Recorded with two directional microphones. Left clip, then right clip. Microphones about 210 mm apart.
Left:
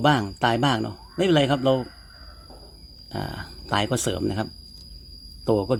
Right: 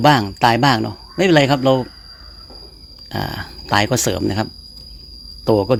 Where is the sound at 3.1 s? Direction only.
20° right (ahead or behind).